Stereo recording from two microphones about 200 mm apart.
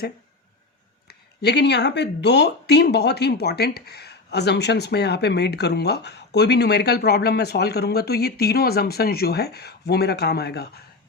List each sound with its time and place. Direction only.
1.0 s speech: 55° left (ahead or behind)